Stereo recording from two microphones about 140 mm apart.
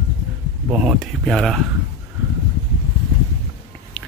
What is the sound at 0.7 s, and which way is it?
Speech, 5° right (ahead or behind).